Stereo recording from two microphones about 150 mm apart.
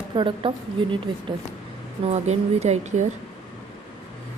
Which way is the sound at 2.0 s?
50° right (ahead or behind).